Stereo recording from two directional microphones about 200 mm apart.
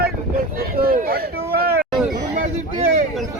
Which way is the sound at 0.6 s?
45° right (ahead or behind).